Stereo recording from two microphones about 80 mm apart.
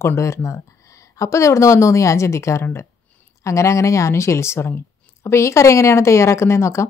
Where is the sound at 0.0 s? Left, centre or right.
Left.